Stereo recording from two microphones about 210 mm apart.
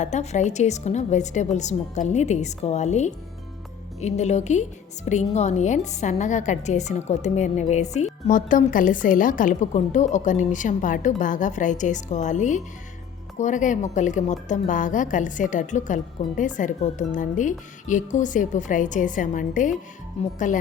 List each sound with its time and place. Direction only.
0.0 s a woman's voice: 35° left (ahead or behind)